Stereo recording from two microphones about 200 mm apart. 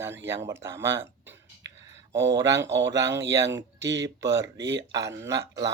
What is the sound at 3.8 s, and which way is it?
Speech, 65° right (ahead or behind).